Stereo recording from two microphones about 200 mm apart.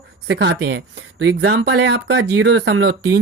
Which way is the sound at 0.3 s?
60° right (ahead or behind).